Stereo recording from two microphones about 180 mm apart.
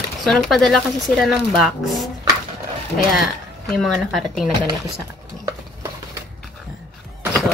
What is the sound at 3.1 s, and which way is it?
Speech, centre (ahead or behind).